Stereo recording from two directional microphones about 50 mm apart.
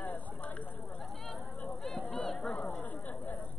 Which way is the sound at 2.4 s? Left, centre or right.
Left.